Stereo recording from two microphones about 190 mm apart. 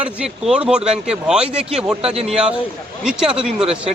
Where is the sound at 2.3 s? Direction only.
5° right (ahead or behind).